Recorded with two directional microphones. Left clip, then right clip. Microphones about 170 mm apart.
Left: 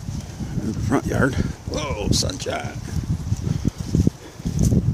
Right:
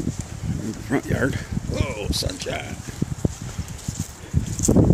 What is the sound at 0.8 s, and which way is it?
Speech, 15° left (ahead or behind).